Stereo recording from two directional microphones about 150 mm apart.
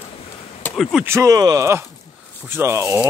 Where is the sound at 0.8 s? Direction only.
Centre (ahead or behind).